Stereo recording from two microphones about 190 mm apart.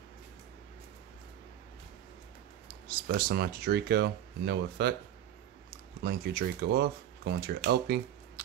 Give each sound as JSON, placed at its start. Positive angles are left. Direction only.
{"t": 3.1, "sound": "speech", "side_deg": -55}
{"t": 6.0, "sound": "speech", "side_deg": -55}